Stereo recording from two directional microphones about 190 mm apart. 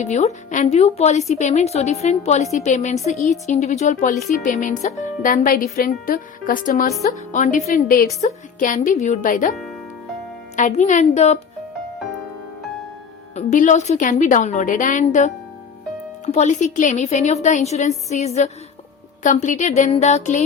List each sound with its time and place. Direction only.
0.0 s a woman's voice: 35° left (ahead or behind)
10.6 s a woman's voice: 40° left (ahead or behind)
13.3 s a woman's voice: 40° left (ahead or behind)